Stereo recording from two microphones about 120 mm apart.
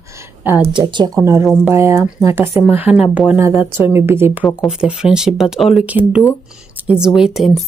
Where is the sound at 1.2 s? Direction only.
25° right (ahead or behind).